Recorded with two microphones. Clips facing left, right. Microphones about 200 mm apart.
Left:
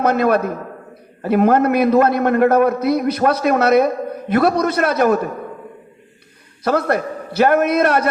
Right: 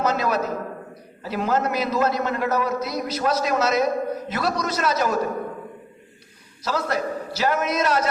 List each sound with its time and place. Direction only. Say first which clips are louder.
0.0 s a man's voice: left 7 dB; 60° left (ahead or behind)
6.7 s a man's voice: left 7 dB; 60° left (ahead or behind)